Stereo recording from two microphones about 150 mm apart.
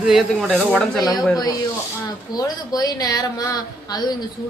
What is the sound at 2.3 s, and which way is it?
A woman's voice, 25° left (ahead or behind).